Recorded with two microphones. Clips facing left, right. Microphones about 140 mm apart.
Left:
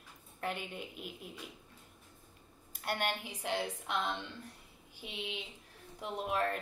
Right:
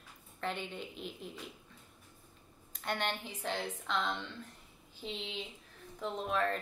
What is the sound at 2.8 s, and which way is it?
A woman's voice, 10° left (ahead or behind).